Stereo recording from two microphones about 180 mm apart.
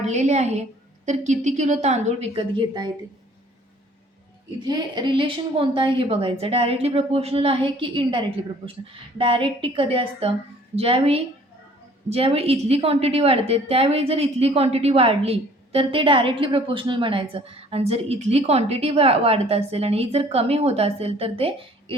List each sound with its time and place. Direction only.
0.0 s a woman's voice: 40° right (ahead or behind)
4.6 s a woman's voice: 25° right (ahead or behind)